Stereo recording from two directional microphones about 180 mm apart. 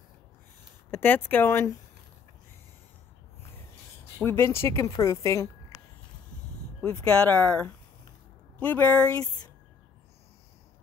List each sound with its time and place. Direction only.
0.9 s a woman's voice: 10° left (ahead or behind)
4.2 s a woman's voice: 10° left (ahead or behind)
6.8 s a woman's voice: 15° left (ahead or behind)